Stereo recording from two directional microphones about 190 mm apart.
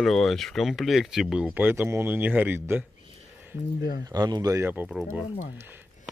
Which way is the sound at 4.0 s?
20° right (ahead or behind).